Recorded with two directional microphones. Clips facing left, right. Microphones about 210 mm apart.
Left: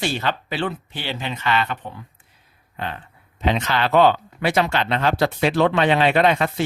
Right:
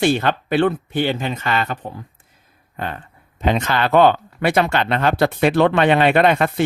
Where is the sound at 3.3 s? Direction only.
50° right (ahead or behind).